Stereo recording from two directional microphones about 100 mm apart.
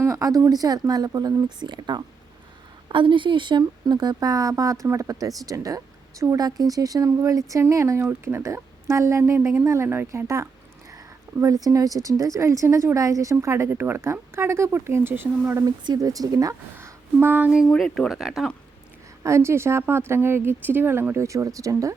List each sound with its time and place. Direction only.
0.0 s a woman's voice: 35° right (ahead or behind)
15.6 s speech: 40° right (ahead or behind)
16.7 s a sound: 20° right (ahead or behind)
17.7 s speech: 5° left (ahead or behind)
19.2 s a woman's voice: 30° right (ahead or behind)
21.2 s speech: 35° right (ahead or behind)